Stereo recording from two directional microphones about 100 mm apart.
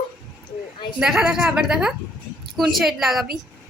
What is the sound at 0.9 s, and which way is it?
A woman's voice, 5° right (ahead or behind).